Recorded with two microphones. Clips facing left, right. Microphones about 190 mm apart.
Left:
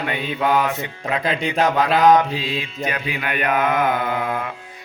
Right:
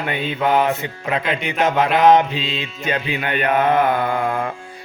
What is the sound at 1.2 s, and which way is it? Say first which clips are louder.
Speech: left 3 dB; 35° left (ahead or behind).